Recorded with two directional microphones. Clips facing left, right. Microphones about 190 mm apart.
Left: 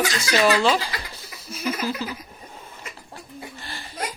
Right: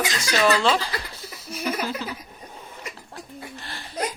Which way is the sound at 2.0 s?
5° left (ahead or behind).